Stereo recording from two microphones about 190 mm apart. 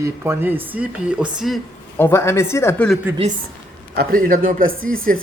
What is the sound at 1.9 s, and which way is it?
Speech, 15° left (ahead or behind).